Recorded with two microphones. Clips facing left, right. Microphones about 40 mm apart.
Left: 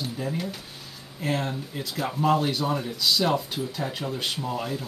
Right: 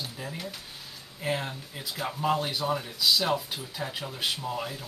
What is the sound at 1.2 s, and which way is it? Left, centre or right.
Speech, centre.